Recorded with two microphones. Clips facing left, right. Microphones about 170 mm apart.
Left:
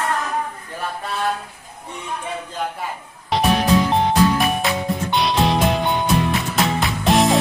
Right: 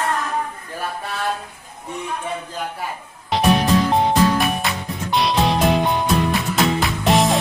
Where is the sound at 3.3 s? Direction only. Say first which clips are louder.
Left 1 dB; centre (ahead or behind).